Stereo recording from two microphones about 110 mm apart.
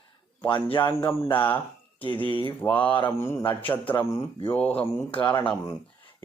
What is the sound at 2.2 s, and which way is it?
Speech, 50° left (ahead or behind).